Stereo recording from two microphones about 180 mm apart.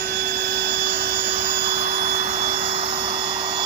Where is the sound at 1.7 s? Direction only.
40° right (ahead or behind).